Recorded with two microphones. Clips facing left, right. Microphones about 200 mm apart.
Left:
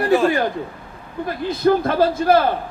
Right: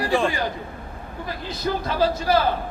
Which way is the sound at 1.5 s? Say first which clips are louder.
Left 9 dB; 55° left (ahead or behind).